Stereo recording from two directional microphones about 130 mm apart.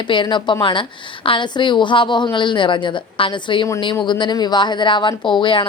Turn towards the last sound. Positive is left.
turn(degrees=40)  # may be behind; listen again after turning